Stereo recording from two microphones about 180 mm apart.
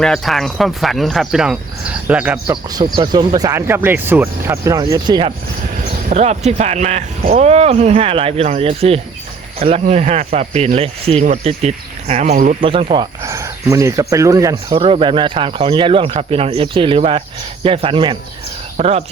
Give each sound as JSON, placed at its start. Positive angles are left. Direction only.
{"t": 0.0, "sound": "speech", "side_deg": 0}
{"t": 2.8, "sound": "speech", "side_deg": -25}
{"t": 6.1, "sound": "speech", "side_deg": -40}
{"t": 12.5, "sound": "speech", "side_deg": -30}
{"t": 13.2, "sound": "speech", "side_deg": -15}
{"t": 14.7, "sound": "speech", "side_deg": -30}